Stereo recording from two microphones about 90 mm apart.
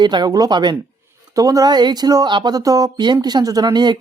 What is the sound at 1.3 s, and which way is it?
Speech, 40° right (ahead or behind).